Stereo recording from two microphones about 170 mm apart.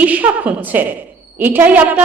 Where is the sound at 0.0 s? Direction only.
10° right (ahead or behind).